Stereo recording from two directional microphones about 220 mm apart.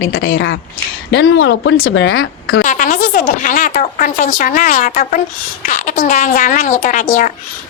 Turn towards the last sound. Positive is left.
turn(degrees=35)  # may be behind; listen again after turning